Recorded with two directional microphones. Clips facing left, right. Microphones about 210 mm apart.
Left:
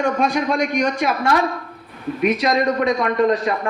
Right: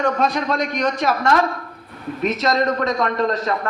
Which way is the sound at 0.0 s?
10° left (ahead or behind).